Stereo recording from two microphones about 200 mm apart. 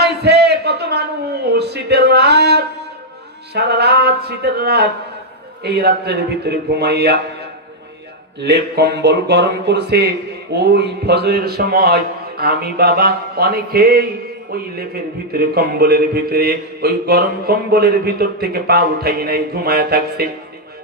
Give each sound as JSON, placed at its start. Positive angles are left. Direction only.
{"t": 0.0, "sound": "a sound", "side_deg": -55}
{"t": 3.5, "sound": "mantra", "side_deg": -55}
{"t": 5.6, "sound": "speech", "side_deg": -55}
{"t": 8.4, "sound": "speech", "side_deg": -55}
{"t": 10.5, "sound": "mantra", "side_deg": -55}
{"t": 15.3, "sound": "mantra", "side_deg": -50}